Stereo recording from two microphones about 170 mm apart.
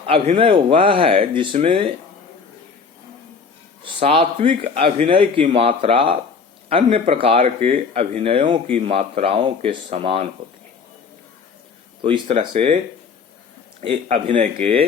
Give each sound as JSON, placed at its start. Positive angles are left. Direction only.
{"t": 0.0, "sound": "speech", "side_deg": -35}
{"t": 3.8, "sound": "speech", "side_deg": -30}
{"t": 12.0, "sound": "speech", "side_deg": -30}
{"t": 14.1, "sound": "speech", "side_deg": -40}